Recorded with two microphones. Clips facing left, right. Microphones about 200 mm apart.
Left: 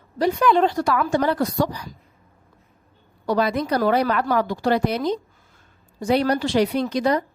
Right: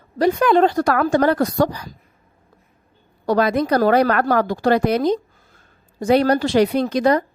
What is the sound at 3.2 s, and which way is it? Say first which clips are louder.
Speech: right 4 dB; 45° right (ahead or behind).